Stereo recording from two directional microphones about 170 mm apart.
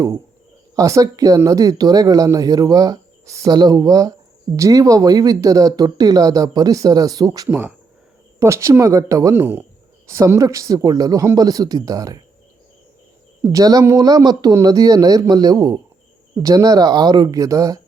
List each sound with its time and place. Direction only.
0.8 s speech: 20° right (ahead or behind)
7.4 s speech: 10° right (ahead or behind)
13.4 s speech: 20° right (ahead or behind)